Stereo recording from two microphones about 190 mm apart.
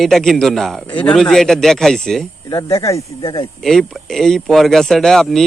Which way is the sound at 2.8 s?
15° left (ahead or behind).